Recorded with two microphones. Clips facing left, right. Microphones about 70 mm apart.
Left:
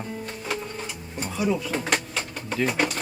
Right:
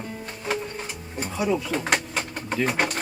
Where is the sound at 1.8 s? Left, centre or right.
Right.